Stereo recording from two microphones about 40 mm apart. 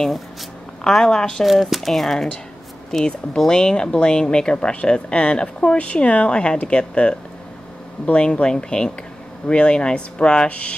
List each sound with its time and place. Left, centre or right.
0.8 s a woman's voice: centre
1.4 s speech: centre; by 10.7 s left